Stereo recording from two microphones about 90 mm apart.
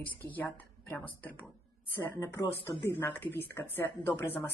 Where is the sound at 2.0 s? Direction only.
30° left (ahead or behind).